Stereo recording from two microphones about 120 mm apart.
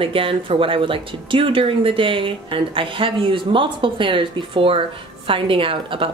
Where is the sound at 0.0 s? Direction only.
50° right (ahead or behind).